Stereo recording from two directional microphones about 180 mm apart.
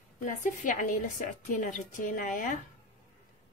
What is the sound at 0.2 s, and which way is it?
A woman's voice, 45° left (ahead or behind).